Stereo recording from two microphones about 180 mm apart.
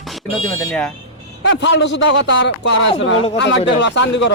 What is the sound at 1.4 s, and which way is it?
Speech, 80° left.